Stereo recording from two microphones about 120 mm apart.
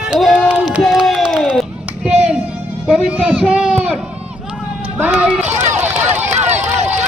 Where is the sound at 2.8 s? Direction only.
10° right (ahead or behind).